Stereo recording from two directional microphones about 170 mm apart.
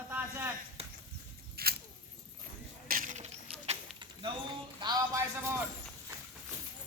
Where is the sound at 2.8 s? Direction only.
55° right (ahead or behind).